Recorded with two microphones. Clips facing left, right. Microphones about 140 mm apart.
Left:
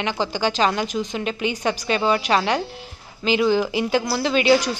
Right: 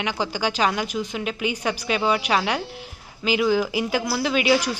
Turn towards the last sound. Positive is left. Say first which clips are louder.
# left 3 dB
turn(degrees=-10)  # may be behind; listen again after turning